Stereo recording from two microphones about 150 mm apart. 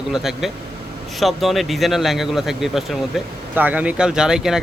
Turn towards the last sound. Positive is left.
turn(degrees=-5)  # may be behind; listen again after turning